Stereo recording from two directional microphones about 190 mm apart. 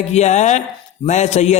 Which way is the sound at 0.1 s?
35° left (ahead or behind).